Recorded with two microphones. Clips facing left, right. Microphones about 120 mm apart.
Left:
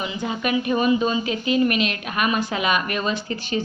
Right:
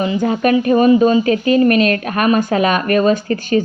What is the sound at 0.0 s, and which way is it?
A woman's voice, 45° right (ahead or behind).